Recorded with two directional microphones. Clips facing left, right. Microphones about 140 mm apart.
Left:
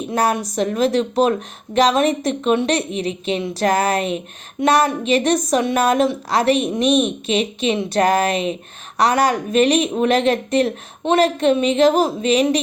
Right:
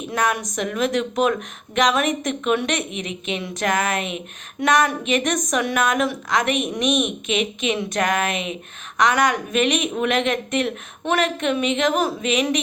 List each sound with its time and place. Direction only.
0.1 s speech: 30° left (ahead or behind)